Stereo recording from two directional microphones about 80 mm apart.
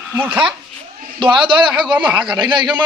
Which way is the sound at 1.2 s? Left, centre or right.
Right.